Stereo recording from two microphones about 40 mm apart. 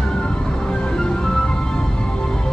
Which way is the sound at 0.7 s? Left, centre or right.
Centre.